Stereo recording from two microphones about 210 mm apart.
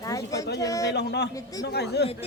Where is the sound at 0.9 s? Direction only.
50° left (ahead or behind).